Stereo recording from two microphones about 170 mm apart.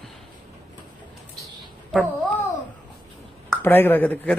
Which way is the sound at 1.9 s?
10° left (ahead or behind).